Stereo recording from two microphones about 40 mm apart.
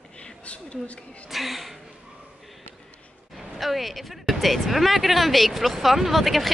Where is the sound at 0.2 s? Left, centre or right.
Left.